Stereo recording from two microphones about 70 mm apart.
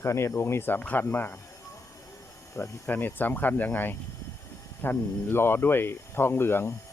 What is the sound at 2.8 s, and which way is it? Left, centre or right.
Speech, left.